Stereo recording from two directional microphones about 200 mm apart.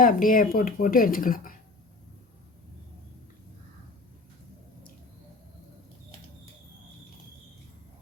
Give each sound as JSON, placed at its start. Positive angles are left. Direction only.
{"t": 0.0, "sound": "speech", "side_deg": 45}